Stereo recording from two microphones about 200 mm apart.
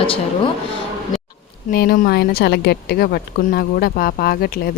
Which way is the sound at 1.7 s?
50° left (ahead or behind).